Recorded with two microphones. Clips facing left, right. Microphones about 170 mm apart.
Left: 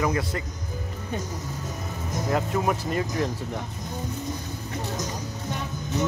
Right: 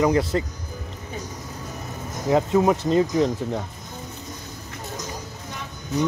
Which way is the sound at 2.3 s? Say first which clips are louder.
Right 7 dB; 25° right (ahead or behind).